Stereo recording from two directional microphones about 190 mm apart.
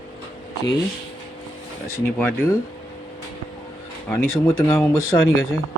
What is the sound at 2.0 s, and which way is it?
Speech, 10° left (ahead or behind).